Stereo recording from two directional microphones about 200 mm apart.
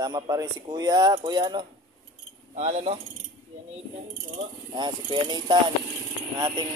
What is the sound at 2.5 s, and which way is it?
Speech, 35° right (ahead or behind).